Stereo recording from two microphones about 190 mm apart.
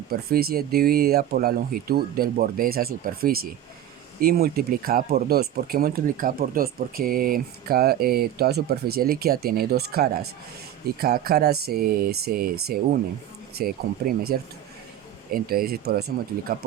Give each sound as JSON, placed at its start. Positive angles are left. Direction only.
{"t": 0.1, "sound": "speech", "side_deg": -55}
{"t": 15.3, "sound": "speech", "side_deg": -50}